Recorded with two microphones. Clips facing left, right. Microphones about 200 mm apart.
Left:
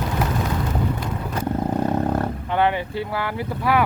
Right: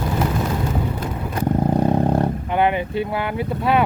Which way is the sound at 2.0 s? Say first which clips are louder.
Right 3 dB; 25° right (ahead or behind).